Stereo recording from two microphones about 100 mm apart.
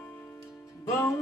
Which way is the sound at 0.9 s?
30° left (ahead or behind).